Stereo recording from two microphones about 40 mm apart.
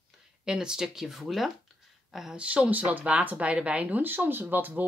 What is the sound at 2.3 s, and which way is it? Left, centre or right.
Speech, right.